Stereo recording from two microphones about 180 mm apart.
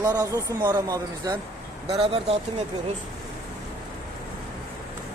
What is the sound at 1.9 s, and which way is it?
Speech, 30° right (ahead or behind).